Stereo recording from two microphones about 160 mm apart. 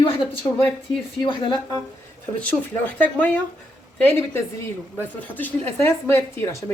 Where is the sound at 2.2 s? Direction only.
10° left (ahead or behind).